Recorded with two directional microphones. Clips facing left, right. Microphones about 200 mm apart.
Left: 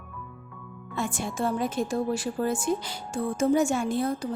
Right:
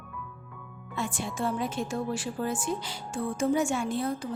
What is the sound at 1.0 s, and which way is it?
A woman's voice, 45° left (ahead or behind).